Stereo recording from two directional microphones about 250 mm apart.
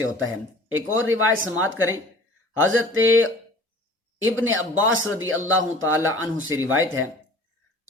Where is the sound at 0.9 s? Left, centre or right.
Right.